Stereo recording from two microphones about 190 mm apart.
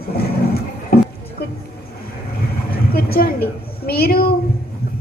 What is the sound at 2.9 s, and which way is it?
A woman's voice, 55° left (ahead or behind).